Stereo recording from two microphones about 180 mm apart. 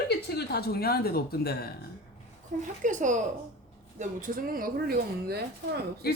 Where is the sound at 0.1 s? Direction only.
65° left (ahead or behind).